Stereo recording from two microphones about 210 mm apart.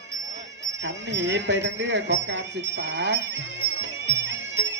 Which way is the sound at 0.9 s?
60° right (ahead or behind).